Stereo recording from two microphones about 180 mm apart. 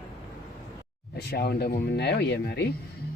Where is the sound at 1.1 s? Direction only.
65° left (ahead or behind).